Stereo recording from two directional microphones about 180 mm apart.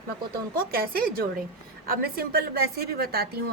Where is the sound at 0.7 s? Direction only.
55° right (ahead or behind).